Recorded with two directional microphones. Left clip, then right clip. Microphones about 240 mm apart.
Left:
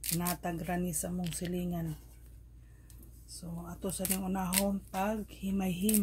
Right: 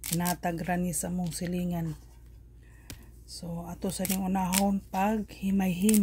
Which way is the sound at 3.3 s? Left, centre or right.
Right.